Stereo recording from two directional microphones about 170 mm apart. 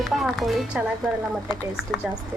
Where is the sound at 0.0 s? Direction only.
Centre (ahead or behind).